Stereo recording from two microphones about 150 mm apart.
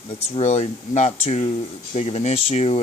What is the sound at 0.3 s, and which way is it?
Speech, 45° left (ahead or behind).